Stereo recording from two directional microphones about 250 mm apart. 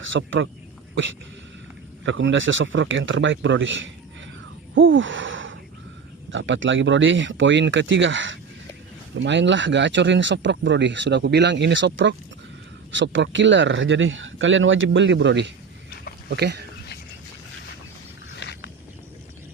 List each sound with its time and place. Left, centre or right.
0.0 s speech: right
2.0 s speech: right
4.7 s a sound: right
6.3 s speech: right
18.3 s walk: left